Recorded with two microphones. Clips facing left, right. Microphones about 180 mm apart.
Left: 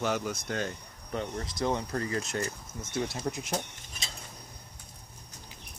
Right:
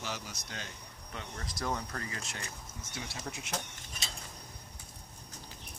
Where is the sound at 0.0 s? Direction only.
55° left (ahead or behind).